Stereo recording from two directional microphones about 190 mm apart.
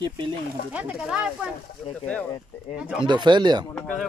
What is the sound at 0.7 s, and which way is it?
Speech, 5° right (ahead or behind).